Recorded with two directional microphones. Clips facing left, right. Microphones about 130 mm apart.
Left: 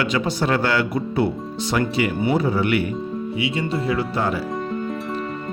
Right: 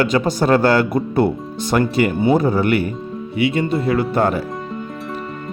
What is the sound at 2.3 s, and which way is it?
Speech, 45° right (ahead or behind).